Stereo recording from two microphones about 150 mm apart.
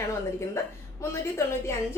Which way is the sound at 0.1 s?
20° left (ahead or behind).